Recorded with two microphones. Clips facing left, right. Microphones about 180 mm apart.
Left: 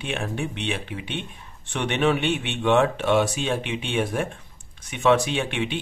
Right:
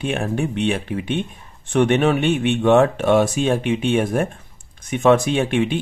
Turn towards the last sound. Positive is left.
turn(degrees=-45)  # may be behind; listen again after turning